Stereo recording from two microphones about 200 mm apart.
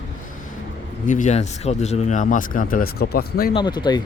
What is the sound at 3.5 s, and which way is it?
Speech, 20° left (ahead or behind).